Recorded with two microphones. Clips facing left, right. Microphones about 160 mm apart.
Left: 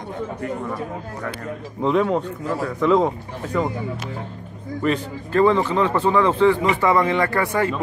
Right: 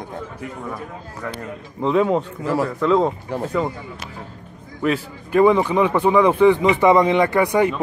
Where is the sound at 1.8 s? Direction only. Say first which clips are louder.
Right 1 dB; centre (ahead or behind).